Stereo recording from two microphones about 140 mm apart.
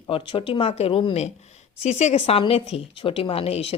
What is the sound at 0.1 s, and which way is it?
Speech, 40° left (ahead or behind).